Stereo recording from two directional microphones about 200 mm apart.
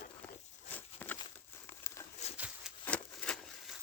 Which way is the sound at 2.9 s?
5° left (ahead or behind).